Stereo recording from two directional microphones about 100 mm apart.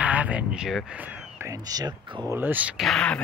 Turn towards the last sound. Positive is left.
turn(degrees=10)  # may be behind; listen again after turning